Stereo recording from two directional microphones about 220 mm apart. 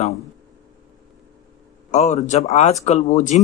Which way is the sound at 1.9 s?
30° left (ahead or behind).